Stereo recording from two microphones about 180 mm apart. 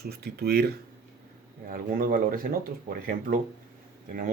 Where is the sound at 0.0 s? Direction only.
65° right (ahead or behind).